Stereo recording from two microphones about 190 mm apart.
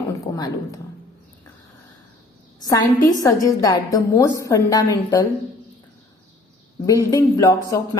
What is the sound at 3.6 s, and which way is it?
A woman's voice, 20° left (ahead or behind).